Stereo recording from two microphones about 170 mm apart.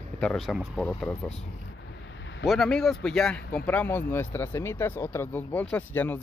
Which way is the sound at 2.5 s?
Centre (ahead or behind).